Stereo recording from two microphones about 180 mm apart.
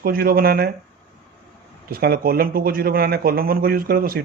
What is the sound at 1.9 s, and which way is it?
Speech, 60° right (ahead or behind).